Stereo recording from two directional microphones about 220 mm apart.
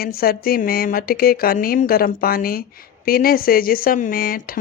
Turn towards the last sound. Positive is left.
turn(degrees=40)  # may be behind; listen again after turning